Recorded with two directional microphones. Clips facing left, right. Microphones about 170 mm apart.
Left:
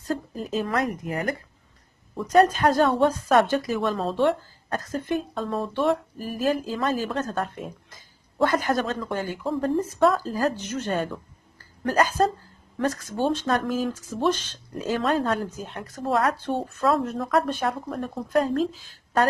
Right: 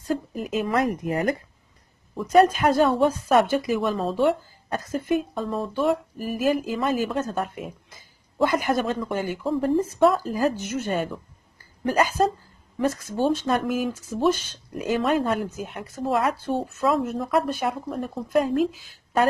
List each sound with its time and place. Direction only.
0.3 s speech: 10° right (ahead or behind)
0.8 s speech: 30° right (ahead or behind)
2.1 s a woman's voice: 10° right (ahead or behind)